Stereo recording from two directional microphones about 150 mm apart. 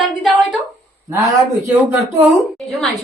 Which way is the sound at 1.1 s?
20° right (ahead or behind).